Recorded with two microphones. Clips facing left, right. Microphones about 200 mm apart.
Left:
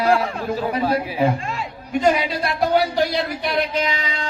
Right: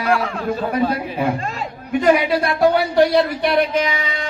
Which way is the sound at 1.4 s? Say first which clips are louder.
Right 2 dB; 40° right (ahead or behind).